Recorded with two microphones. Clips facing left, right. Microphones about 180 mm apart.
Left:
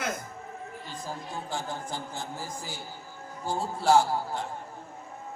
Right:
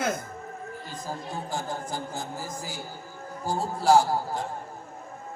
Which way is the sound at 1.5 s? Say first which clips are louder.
Right 2 dB; 40° right (ahead or behind).